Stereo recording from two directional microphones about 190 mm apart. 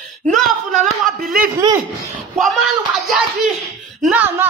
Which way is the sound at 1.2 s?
50° right (ahead or behind).